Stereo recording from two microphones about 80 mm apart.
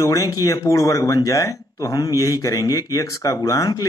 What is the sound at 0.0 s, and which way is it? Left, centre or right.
Speech, left.